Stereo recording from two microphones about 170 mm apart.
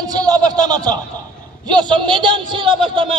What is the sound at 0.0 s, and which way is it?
A man's voice, 20° right (ahead or behind).